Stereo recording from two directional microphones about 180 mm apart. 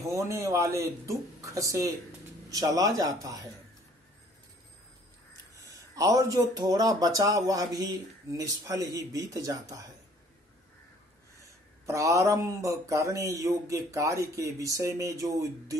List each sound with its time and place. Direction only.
0.0 s speech: 15° right (ahead or behind)
5.7 s speech: 20° right (ahead or behind)
11.8 s speech: 15° right (ahead or behind)